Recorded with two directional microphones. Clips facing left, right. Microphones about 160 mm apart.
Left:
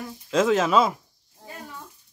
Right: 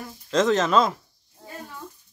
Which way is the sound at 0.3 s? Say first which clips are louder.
Even; 10° left (ahead or behind).